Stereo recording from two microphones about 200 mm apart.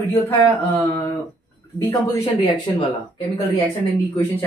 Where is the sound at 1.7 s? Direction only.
15° left (ahead or behind).